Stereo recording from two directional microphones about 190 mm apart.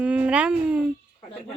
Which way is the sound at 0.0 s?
5° right (ahead or behind).